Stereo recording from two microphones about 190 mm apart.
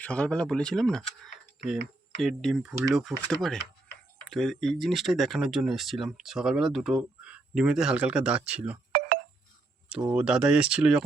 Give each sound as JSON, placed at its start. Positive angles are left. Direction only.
{"t": 0.0, "sound": "speech", "side_deg": 5}
{"t": 8.9, "sound": "telephone dialing", "side_deg": -50}
{"t": 10.0, "sound": "speech", "side_deg": -10}